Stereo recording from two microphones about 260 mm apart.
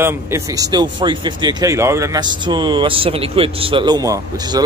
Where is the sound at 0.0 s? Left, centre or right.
Centre.